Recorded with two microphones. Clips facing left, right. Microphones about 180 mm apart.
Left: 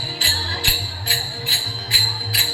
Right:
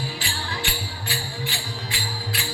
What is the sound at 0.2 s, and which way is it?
Music, 35° left (ahead or behind).